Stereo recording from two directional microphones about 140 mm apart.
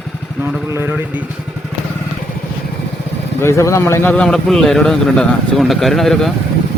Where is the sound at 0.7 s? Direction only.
15° right (ahead or behind).